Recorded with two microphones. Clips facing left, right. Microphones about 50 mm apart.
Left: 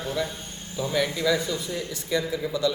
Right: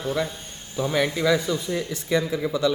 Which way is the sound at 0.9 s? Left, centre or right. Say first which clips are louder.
Right 2 dB; right.